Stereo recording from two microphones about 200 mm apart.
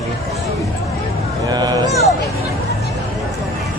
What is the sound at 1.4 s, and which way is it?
Speech, 20° right (ahead or behind).